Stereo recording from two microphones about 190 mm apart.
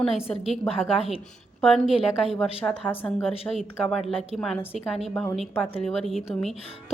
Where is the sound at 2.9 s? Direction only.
10° left (ahead or behind).